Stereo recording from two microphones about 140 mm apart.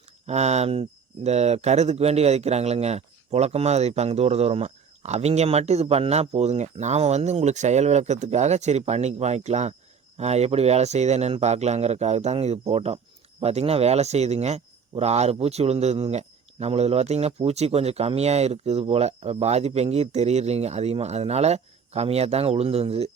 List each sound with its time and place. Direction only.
0.3 s speech: 50° right (ahead or behind)